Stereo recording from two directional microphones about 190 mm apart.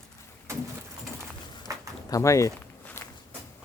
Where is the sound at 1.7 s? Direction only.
15° right (ahead or behind).